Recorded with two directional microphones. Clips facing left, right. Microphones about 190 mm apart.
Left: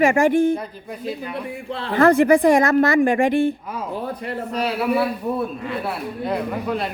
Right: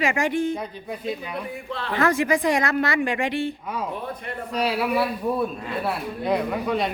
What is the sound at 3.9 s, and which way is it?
Speech, 35° left (ahead or behind).